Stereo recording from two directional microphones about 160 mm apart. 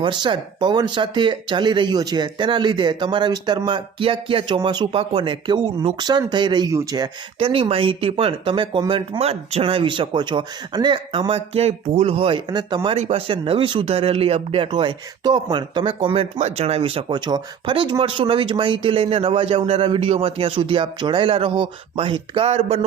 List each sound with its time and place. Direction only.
0.0 s speech: 30° right (ahead or behind)